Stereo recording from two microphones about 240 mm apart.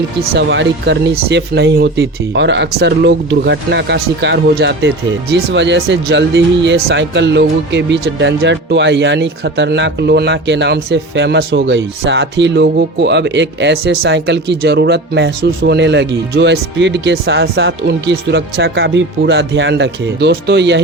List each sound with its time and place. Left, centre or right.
0.3 s speech: right